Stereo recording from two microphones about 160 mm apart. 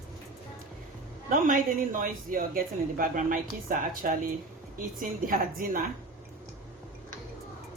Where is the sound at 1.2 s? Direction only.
55° right (ahead or behind).